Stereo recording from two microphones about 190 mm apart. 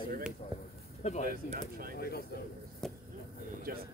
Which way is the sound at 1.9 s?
55° left (ahead or behind).